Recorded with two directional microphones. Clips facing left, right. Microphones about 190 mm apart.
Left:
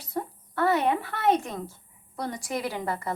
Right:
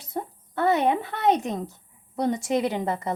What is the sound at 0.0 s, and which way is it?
Speech, 20° right (ahead or behind).